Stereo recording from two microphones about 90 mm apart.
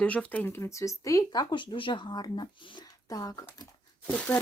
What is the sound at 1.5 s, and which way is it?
Speech, 70° left (ahead or behind).